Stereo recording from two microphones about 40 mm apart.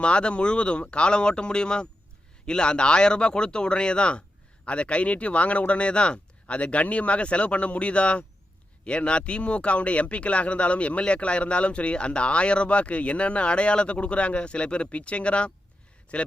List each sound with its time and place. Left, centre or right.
0.0 s speech: left